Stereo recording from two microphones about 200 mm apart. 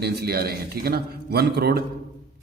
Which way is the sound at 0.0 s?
50° right (ahead or behind).